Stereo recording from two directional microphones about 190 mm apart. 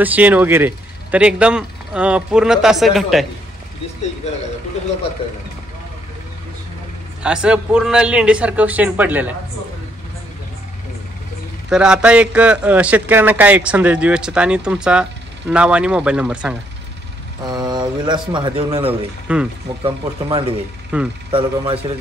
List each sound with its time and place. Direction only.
0.0 s speech: 10° right (ahead or behind)
7.2 s a man's voice: 5° right (ahead or behind)
11.7 s a man's voice: 5° right (ahead or behind)
17.5 s speech: 20° right (ahead or behind)
19.3 s a man's voice: 5° right (ahead or behind)
19.8 s speech: 30° right (ahead or behind)
20.9 s speech: 5° right (ahead or behind)
21.3 s speech: 30° right (ahead or behind)